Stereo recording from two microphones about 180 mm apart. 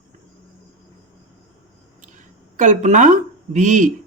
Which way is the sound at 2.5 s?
45° right (ahead or behind).